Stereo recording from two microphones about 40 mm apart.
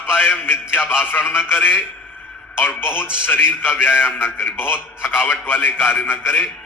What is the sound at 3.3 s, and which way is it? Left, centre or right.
A man's voice, left.